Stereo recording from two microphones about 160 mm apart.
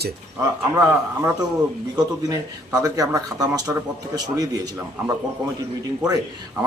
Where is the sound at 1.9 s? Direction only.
25° right (ahead or behind).